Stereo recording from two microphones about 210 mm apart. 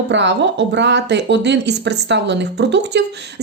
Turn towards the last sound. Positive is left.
turn(degrees=-55)  # may be behind; listen again after turning